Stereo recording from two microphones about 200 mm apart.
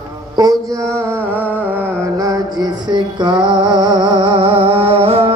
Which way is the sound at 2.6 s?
20° right (ahead or behind).